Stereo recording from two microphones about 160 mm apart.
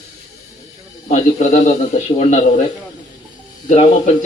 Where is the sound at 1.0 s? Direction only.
45° left (ahead or behind).